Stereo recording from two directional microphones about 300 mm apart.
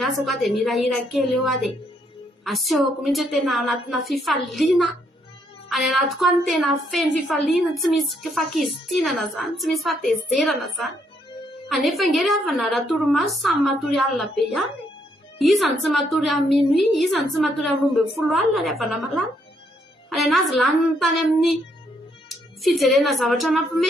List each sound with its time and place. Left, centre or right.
0.0 s a woman's voice: centre
22.6 s a woman's voice: centre